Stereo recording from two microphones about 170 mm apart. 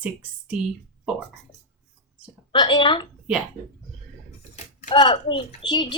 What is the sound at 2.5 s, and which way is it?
Speech, 25° left (ahead or behind).